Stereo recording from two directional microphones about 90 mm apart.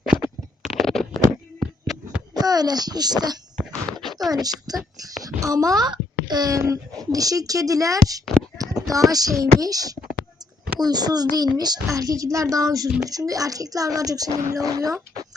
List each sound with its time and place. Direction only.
0.1 s scratch: 5° right (ahead or behind)
0.8 s a sound: 5° left (ahead or behind)
2.4 s a child's voice: 45° right (ahead or behind)
3.9 s a sound: centre (ahead or behind)
4.3 s a child's voice: 45° right (ahead or behind)
6.6 s a child's voice: 40° right (ahead or behind)